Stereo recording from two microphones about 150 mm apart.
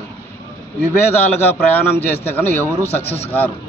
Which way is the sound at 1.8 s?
15° left (ahead or behind).